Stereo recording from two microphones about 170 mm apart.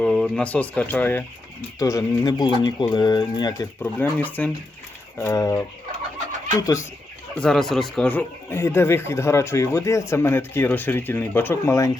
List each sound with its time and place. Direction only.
0.0 s speech: centre (ahead or behind); by 3.7 s 25° left (ahead or behind)
3.9 s speech: 10° left (ahead or behind)
7.3 s speech: 5° left (ahead or behind)